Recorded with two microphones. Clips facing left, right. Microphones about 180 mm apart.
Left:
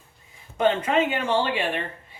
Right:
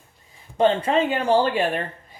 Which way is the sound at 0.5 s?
30° right (ahead or behind).